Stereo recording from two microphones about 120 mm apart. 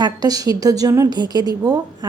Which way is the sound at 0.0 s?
30° right (ahead or behind).